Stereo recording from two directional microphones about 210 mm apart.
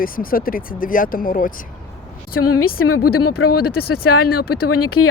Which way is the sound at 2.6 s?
90° left.